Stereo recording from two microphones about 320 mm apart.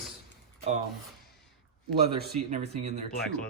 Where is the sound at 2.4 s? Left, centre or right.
Right.